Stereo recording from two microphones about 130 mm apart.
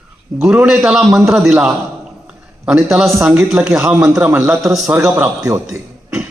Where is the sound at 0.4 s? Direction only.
5° right (ahead or behind).